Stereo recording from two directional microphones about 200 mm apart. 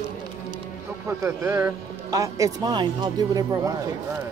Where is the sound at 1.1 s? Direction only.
15° right (ahead or behind).